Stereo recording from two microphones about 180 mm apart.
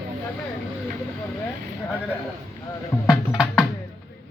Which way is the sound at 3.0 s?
5° right (ahead or behind).